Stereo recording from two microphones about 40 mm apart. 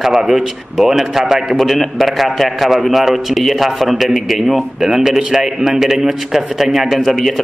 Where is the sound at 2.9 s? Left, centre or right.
Centre.